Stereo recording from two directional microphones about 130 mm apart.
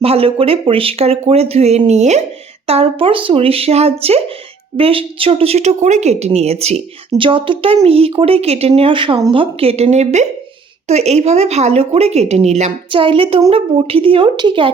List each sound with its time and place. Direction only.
0.0 s speech: 50° right (ahead or behind)
2.6 s speech: 50° right (ahead or behind)
7.2 s speech: 40° right (ahead or behind); by 12.7 s 60° right (ahead or behind)
12.9 s speech: 40° right (ahead or behind)